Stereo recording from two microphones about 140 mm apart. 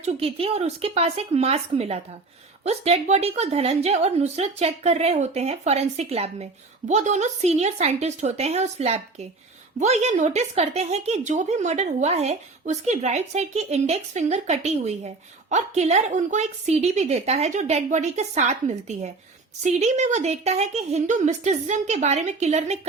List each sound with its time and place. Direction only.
0.0 s speech: 45° right (ahead or behind)
19.6 s speech: 55° right (ahead or behind)